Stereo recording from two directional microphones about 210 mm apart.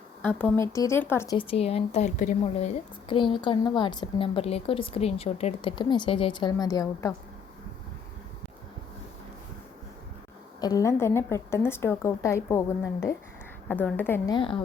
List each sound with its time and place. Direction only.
0.3 s a woman's voice: 10° left (ahead or behind)
1.4 s a woman's voice: 25° left (ahead or behind)
10.6 s a woman's voice: 15° left (ahead or behind)
14.3 s a woman's voice: 25° left (ahead or behind)